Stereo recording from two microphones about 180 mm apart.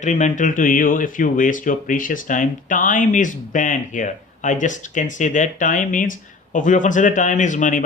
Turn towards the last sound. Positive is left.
turn(degrees=45)  # may be behind; listen again after turning